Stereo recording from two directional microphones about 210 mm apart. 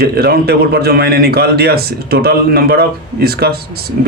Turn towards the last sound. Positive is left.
turn(degrees=-45)  # may be behind; listen again after turning